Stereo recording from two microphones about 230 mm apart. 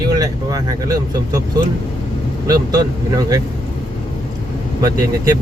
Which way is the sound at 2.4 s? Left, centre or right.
Centre.